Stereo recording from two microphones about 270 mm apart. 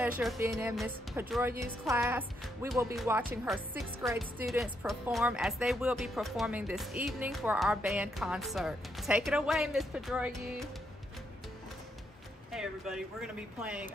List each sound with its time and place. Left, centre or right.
0.4 s a woman's voice: centre
12.4 s speech: centre